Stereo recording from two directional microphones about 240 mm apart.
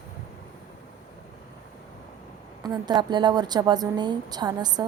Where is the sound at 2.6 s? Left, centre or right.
Centre.